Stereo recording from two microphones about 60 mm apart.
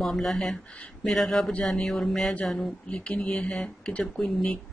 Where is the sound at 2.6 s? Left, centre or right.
Centre.